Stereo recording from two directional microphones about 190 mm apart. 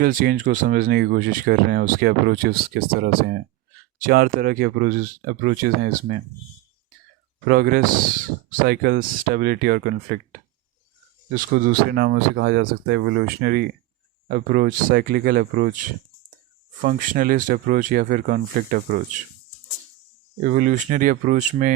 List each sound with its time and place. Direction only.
0.0 s speech: 45° right (ahead or behind)
7.4 s speech: 55° right (ahead or behind); by 13.1 s 80° right
13.1 s speech: 55° right (ahead or behind)
16.8 s speech: 45° right (ahead or behind)
20.4 s speech: 40° right (ahead or behind)